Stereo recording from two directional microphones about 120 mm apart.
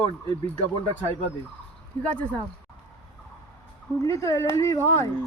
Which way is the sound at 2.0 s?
10° left (ahead or behind).